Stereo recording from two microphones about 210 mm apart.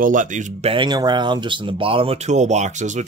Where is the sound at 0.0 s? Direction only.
40° right (ahead or behind).